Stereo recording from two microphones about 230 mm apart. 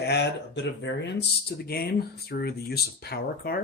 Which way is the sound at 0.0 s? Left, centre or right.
Left.